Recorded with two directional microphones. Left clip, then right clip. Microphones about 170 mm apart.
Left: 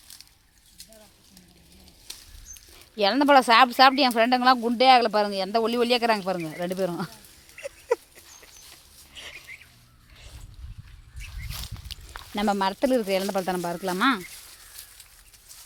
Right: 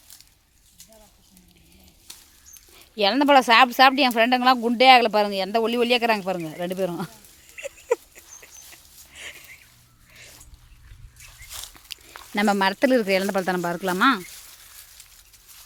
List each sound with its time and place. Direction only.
2.1 s rodents: centre (ahead or behind)
2.7 s speech: 5° right (ahead or behind)
9.1 s a sound: 10° right (ahead or behind)
11.5 s walk: 10° right (ahead or behind)
12.3 s speech: 30° right (ahead or behind)